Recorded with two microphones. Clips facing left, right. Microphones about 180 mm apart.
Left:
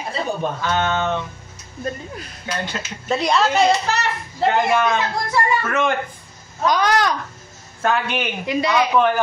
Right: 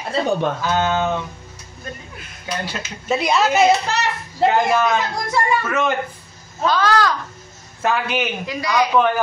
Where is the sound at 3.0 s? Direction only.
5° right (ahead or behind).